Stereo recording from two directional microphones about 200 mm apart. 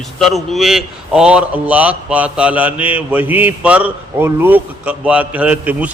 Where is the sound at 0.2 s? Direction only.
Centre (ahead or behind).